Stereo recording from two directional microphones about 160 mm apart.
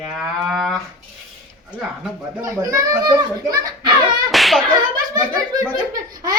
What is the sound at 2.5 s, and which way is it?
A child's voice, 20° right (ahead or behind).